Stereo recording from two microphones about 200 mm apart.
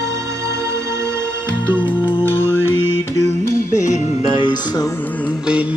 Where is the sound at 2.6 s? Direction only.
85° left.